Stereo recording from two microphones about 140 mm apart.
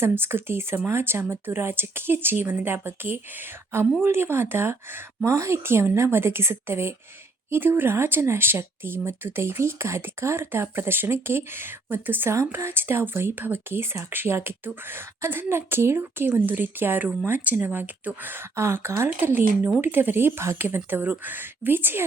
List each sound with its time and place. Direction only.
0.0 s speech: 15° right (ahead or behind)